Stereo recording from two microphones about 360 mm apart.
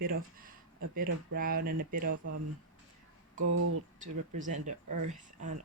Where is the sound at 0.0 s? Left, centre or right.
Right.